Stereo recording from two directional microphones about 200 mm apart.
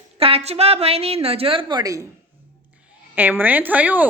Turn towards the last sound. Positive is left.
turn(degrees=-10)  # may be behind; listen again after turning